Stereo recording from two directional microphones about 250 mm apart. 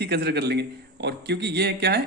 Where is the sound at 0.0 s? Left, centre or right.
Right.